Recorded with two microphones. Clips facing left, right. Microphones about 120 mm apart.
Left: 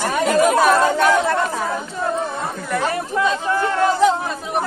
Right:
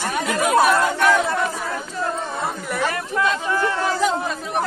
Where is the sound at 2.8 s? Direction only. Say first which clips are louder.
Left 1 dB; 25° left (ahead or behind).